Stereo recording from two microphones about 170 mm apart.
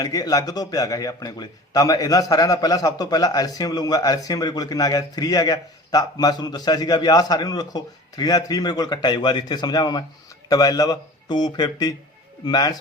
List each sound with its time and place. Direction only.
0.0 s a man's voice: 20° left (ahead or behind)